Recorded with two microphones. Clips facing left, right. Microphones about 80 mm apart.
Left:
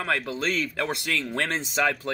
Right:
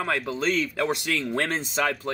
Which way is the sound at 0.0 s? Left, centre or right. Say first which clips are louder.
Right 1 dB; centre.